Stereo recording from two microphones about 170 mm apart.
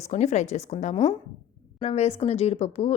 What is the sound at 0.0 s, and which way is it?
Speech, 40° left (ahead or behind).